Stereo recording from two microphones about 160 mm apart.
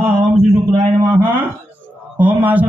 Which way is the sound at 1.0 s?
15° right (ahead or behind).